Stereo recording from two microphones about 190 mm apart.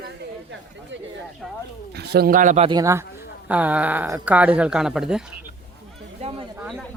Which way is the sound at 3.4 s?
5° right (ahead or behind).